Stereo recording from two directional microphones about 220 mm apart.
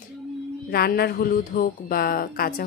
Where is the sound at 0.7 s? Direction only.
45° left (ahead or behind).